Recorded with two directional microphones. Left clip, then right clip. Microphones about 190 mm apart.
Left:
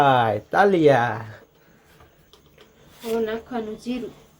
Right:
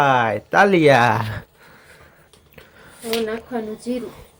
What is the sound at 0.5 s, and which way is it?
Speech, 15° right (ahead or behind).